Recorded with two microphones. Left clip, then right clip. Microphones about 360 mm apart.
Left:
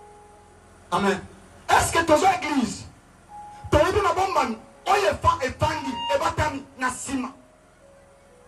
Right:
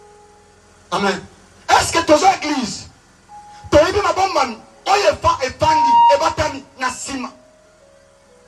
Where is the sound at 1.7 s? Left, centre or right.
Centre.